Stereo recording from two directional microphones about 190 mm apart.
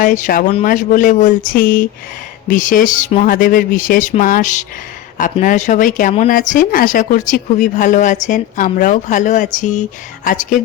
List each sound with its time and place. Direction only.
0.0 s speech: 45° left (ahead or behind)